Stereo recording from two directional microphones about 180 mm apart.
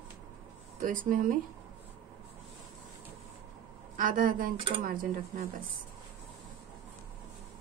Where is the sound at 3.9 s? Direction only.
50° right (ahead or behind).